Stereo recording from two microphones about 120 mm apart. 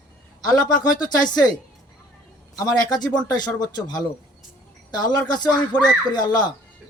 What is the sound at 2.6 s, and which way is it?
Speech, 35° left (ahead or behind).